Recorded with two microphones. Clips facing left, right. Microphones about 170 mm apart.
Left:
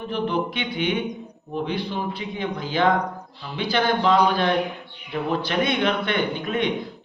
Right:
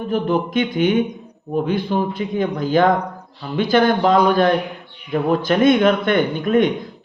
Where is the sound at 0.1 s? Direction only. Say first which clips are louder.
Right 6 dB; 45° right (ahead or behind).